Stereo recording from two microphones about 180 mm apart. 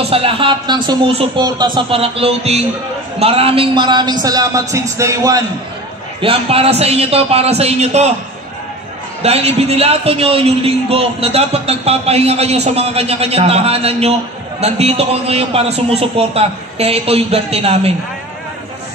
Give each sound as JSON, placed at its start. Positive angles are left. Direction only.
{"t": 0.1, "sound": "speech", "side_deg": -30}
{"t": 6.2, "sound": "a man's voice", "side_deg": -30}
{"t": 9.2, "sound": "a man's voice", "side_deg": -35}